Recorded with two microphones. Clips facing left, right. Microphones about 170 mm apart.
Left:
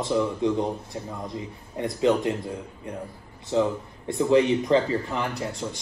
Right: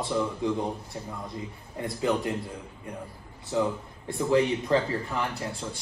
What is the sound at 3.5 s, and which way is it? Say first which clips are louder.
A man's voice: left 4 dB; 20° left (ahead or behind).